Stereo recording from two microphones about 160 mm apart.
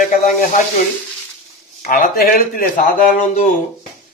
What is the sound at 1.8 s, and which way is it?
Speech, 55° left (ahead or behind).